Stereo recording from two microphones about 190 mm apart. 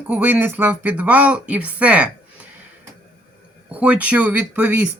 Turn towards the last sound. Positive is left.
turn(degrees=-10)  # may be behind; listen again after turning